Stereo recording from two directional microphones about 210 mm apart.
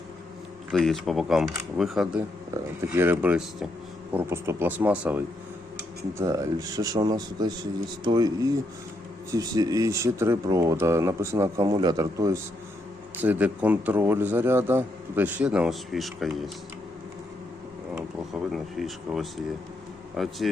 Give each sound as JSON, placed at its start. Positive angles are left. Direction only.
{"t": 0.7, "sound": "a man's voice", "side_deg": 0}
{"t": 18.5, "sound": "speech", "side_deg": 0}